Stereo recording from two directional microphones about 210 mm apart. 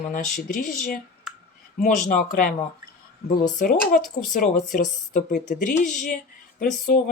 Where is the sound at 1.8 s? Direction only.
40° left (ahead or behind).